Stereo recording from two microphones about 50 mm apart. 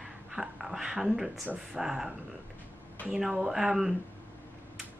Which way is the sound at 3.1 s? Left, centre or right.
Centre.